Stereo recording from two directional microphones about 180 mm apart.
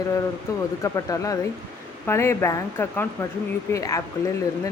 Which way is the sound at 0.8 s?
15° left (ahead or behind).